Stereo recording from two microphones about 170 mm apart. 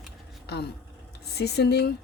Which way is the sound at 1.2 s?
70° left (ahead or behind).